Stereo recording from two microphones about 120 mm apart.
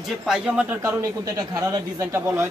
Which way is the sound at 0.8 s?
25° right (ahead or behind).